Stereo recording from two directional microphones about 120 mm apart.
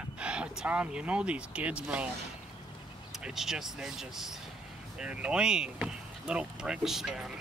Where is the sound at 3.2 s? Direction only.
5° right (ahead or behind).